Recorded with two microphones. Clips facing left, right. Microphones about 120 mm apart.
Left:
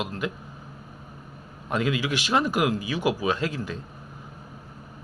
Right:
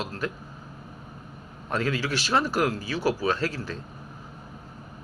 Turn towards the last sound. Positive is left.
turn(degrees=15)  # may be behind; listen again after turning